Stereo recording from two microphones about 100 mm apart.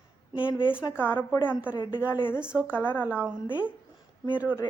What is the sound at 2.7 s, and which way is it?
Speech, 20° left (ahead or behind).